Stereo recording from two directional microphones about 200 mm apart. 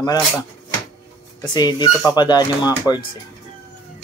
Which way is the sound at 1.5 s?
20° left (ahead or behind).